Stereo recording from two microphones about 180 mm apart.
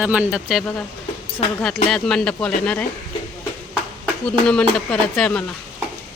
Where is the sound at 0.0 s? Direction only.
5° right (ahead or behind).